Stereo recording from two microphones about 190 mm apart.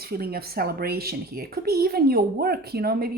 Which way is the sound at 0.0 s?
55° right (ahead or behind).